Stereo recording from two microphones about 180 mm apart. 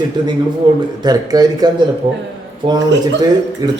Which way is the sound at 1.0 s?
20° right (ahead or behind).